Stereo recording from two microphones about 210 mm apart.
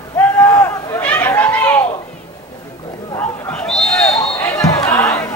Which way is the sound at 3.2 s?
5° left (ahead or behind).